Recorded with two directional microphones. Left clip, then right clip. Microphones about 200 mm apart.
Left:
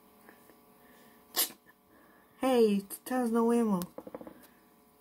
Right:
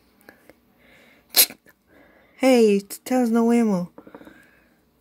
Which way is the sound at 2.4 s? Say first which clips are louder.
Right 10 dB; 35° right (ahead or behind).